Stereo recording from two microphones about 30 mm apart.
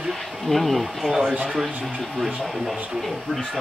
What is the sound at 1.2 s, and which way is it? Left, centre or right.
Speech, right.